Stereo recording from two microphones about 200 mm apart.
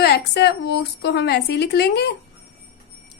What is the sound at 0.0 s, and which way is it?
A woman's voice, 55° left (ahead or behind).